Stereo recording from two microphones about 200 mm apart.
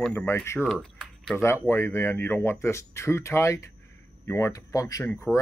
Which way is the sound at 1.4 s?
15° left (ahead or behind).